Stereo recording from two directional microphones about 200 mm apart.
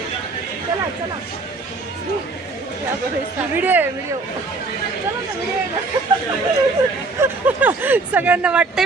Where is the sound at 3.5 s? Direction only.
10° right (ahead or behind).